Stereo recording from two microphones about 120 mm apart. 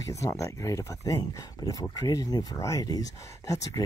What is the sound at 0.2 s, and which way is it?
Speech, 25° left (ahead or behind).